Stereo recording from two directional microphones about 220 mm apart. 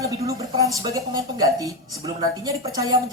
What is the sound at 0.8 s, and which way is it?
Speech, 15° right (ahead or behind).